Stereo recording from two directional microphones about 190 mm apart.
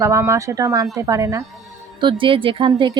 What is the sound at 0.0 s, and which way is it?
A woman's voice, 15° right (ahead or behind).